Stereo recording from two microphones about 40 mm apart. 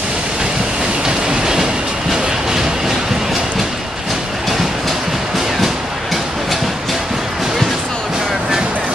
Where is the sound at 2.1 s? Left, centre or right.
Centre.